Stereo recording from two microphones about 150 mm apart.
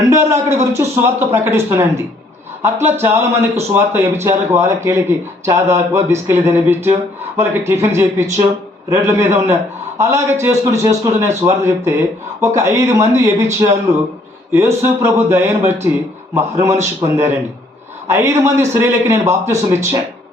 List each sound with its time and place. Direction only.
0.0 s a man's voice: 20° right (ahead or behind)